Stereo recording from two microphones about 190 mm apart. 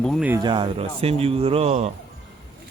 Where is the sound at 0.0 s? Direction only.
5° left (ahead or behind).